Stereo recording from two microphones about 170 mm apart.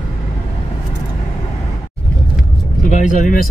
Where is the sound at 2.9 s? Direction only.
45° left (ahead or behind).